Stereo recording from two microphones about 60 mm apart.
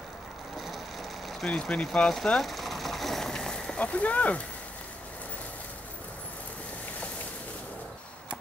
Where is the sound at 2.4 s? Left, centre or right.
Centre; by 4.4 s left.